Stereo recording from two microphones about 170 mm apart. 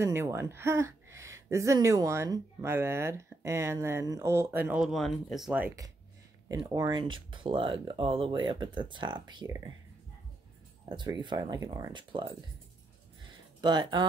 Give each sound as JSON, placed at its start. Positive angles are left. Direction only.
{"t": 0.0, "sound": "speech", "side_deg": -15}
{"t": 6.5, "sound": "speech", "side_deg": -20}
{"t": 10.9, "sound": "speech", "side_deg": -25}
{"t": 13.6, "sound": "speech", "side_deg": -25}